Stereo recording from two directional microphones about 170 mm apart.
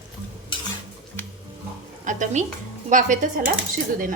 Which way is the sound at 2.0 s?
45° right (ahead or behind).